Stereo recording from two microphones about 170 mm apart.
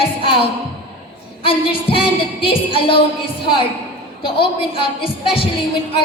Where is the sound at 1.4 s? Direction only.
30° left (ahead or behind).